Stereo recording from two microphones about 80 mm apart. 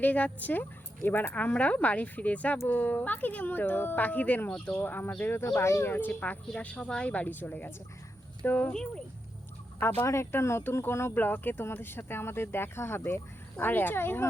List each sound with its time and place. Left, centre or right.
0.0 s a woman's voice: centre
9.8 s speech: left